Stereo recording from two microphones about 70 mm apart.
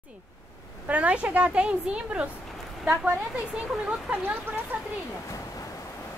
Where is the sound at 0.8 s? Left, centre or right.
Centre.